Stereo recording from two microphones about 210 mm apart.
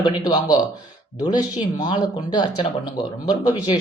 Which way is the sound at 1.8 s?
20° left (ahead or behind).